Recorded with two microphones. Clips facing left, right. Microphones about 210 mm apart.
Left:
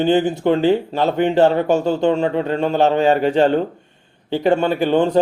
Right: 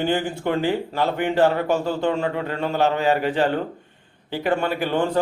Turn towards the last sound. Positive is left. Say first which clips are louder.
# left 6 dB
turn(degrees=25)  # may be behind; listen again after turning